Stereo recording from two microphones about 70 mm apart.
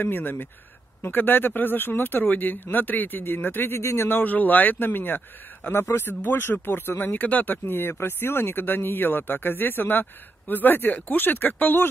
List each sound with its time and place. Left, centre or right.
0.0 s speech: left